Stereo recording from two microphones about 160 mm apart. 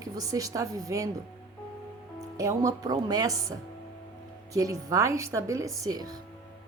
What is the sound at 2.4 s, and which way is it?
Speech, 20° right (ahead or behind).